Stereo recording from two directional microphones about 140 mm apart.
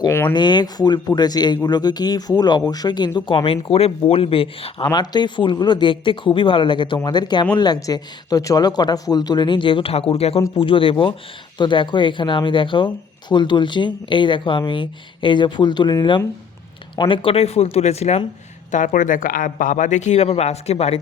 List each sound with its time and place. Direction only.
0.0 s speech: 15° left (ahead or behind)
0.3 s speech: 30° left (ahead or behind); by 18.2 s 50° left (ahead or behind)
18.7 s speech: 65° left (ahead or behind); by 21.0 s 45° left (ahead or behind)